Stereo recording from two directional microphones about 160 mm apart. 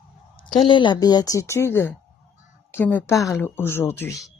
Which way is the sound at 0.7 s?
30° left (ahead or behind).